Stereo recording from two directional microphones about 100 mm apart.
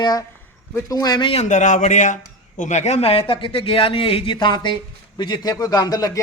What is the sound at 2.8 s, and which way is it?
Speech, 85° left.